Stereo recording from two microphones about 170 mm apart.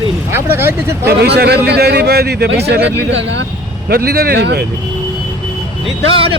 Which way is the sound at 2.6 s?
80° right.